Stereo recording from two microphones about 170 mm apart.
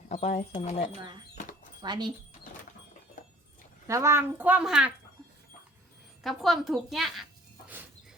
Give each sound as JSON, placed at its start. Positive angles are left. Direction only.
{"t": 0.1, "sound": "speech", "side_deg": 40}
{"t": 1.8, "sound": "speech", "side_deg": -25}
{"t": 3.8, "sound": "a woman's voice", "side_deg": -15}
{"t": 6.2, "sound": "a woman's voice", "side_deg": 0}